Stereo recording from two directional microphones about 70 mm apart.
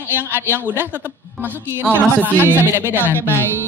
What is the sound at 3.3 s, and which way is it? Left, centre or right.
Speech, left.